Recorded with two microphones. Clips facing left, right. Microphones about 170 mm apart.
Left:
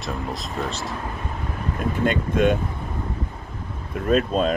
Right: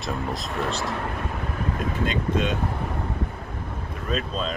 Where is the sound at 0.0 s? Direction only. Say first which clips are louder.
Even; centre (ahead or behind).